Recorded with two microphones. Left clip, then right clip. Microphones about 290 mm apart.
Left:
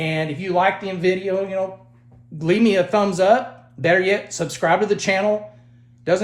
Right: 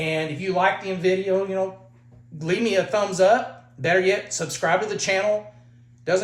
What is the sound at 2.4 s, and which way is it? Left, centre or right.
Speech, left.